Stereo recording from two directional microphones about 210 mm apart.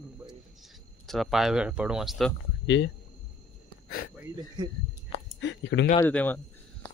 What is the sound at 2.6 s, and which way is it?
Speech, 60° left (ahead or behind).